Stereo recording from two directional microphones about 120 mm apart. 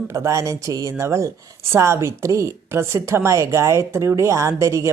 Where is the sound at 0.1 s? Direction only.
25° right (ahead or behind).